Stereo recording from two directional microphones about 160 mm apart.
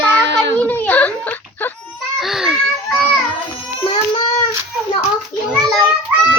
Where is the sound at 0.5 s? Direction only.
10° left (ahead or behind).